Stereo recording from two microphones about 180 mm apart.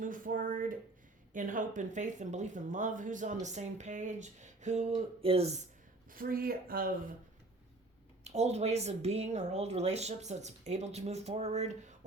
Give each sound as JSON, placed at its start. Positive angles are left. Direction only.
{"t": 0.0, "sound": "speech", "side_deg": -50}
{"t": 6.1, "sound": "speech", "side_deg": -50}
{"t": 8.2, "sound": "speech", "side_deg": -35}